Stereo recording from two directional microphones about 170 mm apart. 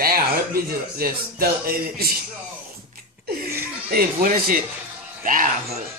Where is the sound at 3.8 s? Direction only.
60° right (ahead or behind).